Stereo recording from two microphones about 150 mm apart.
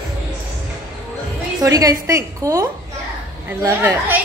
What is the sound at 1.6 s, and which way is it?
A woman's voice, 25° right (ahead or behind).